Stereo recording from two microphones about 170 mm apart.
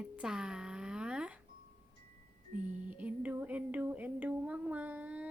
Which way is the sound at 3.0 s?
10° right (ahead or behind).